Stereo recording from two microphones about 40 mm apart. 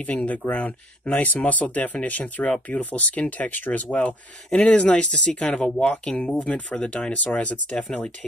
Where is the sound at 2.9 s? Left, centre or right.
Left.